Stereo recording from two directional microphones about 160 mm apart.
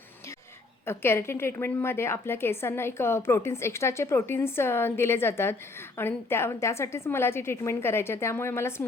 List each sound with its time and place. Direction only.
0.9 s a woman's voice: 15° left (ahead or behind)